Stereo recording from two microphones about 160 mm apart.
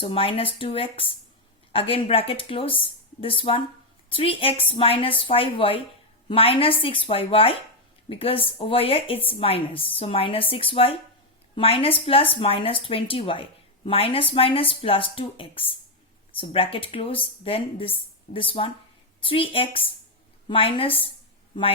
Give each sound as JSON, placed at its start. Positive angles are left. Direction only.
{"t": 0.0, "sound": "a woman's voice", "side_deg": 35}